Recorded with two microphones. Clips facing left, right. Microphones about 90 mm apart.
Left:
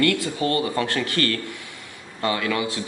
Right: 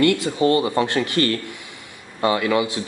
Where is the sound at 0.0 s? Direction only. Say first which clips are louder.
Right 4 dB; 20° right (ahead or behind).